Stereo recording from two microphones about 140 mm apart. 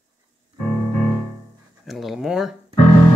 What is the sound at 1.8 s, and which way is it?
Speech, centre (ahead or behind).